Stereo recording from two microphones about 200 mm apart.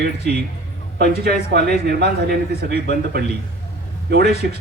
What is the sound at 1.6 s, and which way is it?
A man's voice, 55° right (ahead or behind).